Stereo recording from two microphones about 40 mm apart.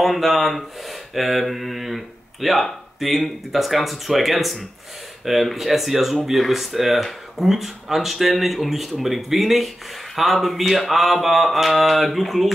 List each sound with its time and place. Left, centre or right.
0.0 s mantra: centre